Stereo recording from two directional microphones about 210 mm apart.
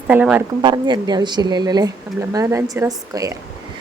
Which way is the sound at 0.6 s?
20° right (ahead or behind).